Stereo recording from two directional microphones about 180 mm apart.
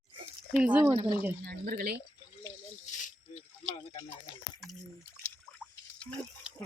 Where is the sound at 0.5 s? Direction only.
5° right (ahead or behind).